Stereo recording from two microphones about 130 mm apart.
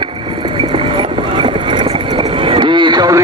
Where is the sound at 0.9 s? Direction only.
40° right (ahead or behind).